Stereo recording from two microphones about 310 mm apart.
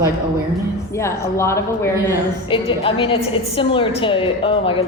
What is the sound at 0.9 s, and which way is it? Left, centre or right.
A woman's voice, centre.